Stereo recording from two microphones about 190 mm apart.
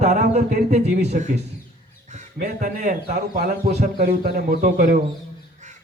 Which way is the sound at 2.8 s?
40° right (ahead or behind).